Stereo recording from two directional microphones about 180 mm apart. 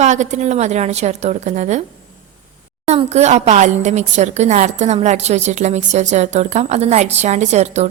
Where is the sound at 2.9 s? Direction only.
35° right (ahead or behind).